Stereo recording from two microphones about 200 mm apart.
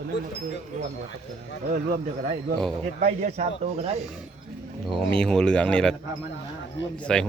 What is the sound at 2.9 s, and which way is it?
Speech, 40° right (ahead or behind).